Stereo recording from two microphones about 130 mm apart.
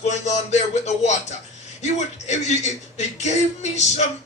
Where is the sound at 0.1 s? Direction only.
60° left (ahead or behind).